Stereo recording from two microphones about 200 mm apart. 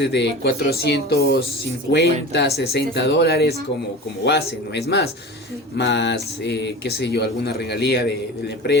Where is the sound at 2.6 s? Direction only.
55° left (ahead or behind).